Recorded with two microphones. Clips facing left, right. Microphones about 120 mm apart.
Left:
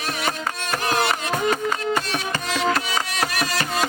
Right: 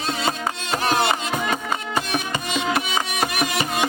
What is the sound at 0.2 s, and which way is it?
Music, 25° right (ahead or behind).